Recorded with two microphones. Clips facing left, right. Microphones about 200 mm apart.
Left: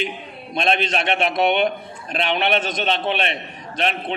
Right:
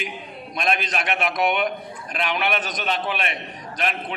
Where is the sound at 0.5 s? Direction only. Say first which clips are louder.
Left 4 dB; 25° left (ahead or behind).